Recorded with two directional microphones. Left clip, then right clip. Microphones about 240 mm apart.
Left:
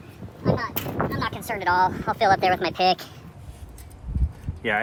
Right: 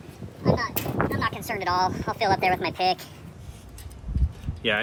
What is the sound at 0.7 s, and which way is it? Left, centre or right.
Speech, centre.